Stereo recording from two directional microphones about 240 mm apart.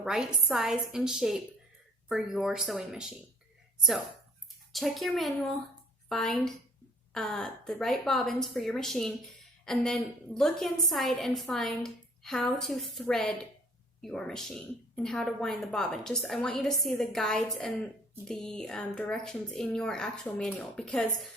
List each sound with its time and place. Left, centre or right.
0.0 s a woman's voice: centre
4.7 s a woman's voice: centre